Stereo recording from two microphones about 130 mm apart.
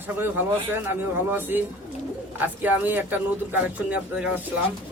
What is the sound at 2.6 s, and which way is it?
Speech, 15° right (ahead or behind).